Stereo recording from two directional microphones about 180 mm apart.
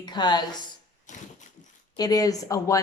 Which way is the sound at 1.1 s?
40° left (ahead or behind).